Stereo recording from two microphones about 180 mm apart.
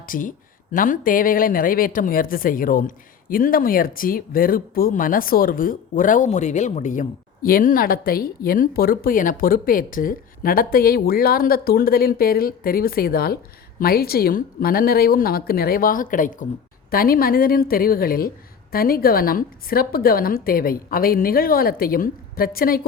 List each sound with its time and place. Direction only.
0.0 s a woman's voice: 50° left (ahead or behind)